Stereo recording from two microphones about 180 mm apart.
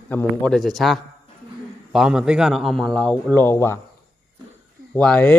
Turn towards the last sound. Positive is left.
turn(degrees=5)  # may be behind; listen again after turning